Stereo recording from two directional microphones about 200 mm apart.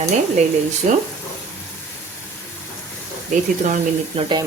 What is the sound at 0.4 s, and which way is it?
Speech, 35° right (ahead or behind).